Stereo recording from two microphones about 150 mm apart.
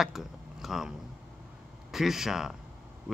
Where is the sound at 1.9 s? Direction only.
Centre (ahead or behind).